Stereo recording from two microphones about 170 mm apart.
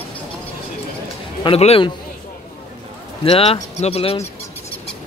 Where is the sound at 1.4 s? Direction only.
35° left (ahead or behind).